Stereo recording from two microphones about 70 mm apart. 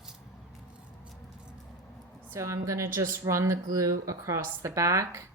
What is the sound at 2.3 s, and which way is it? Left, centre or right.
A woman's voice, right.